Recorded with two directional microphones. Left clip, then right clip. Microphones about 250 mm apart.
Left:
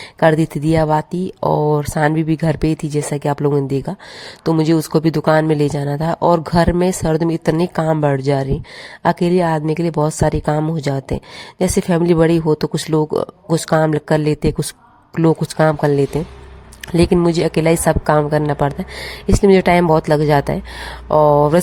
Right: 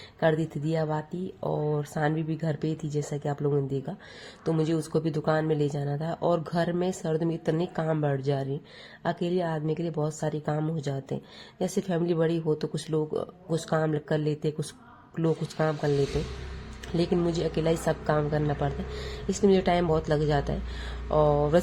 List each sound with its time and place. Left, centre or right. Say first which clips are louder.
0.2 s speech: left 12 dB; left